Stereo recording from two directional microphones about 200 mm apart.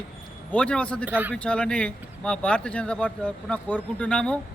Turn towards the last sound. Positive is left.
turn(degrees=5)  # may be behind; listen again after turning